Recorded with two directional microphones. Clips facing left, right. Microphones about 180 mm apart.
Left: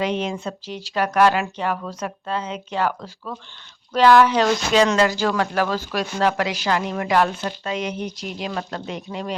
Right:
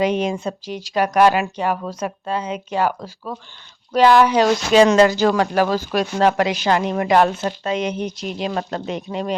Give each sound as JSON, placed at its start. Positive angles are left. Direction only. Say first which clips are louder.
{"t": 0.0, "sound": "a woman's voice", "louder": "right 4 dB", "side_deg": -15}
{"t": 6.1, "sound": "speech", "louder": "right 4 dB", "side_deg": -35}
{"t": 6.4, "sound": "a woman's voice", "louder": "right 4 dB", "side_deg": -20}